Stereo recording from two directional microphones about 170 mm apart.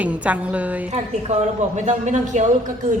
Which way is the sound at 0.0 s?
10° right (ahead or behind).